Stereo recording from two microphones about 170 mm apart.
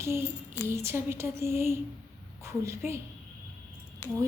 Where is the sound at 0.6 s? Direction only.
15° right (ahead or behind).